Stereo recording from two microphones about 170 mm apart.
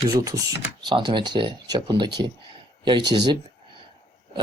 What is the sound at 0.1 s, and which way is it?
Speech, 20° right (ahead or behind).